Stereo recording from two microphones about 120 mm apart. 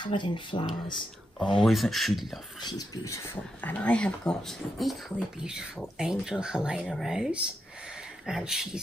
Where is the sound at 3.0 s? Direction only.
20° left (ahead or behind).